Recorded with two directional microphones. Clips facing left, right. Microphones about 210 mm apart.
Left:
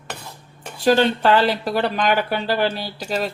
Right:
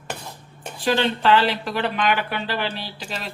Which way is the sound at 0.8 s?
45° left (ahead or behind).